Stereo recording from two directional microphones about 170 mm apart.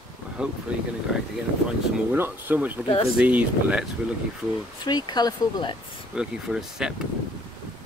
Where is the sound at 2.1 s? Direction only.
10° right (ahead or behind).